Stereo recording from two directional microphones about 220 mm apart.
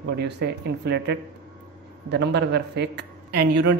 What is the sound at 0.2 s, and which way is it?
A man's voice, 50° right (ahead or behind).